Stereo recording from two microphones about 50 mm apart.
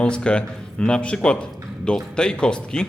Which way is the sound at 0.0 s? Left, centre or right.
Centre.